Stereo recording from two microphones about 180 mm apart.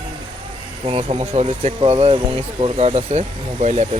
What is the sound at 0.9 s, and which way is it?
Speech, 35° right (ahead or behind).